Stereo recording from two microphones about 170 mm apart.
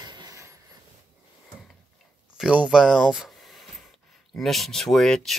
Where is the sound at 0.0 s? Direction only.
25° right (ahead or behind).